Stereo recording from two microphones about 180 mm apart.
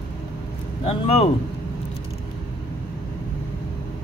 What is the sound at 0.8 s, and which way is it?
Speech, 35° left (ahead or behind).